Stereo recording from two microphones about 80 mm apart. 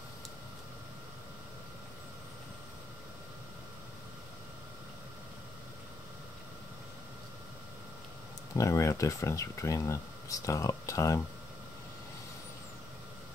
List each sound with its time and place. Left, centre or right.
8.5 s speech: left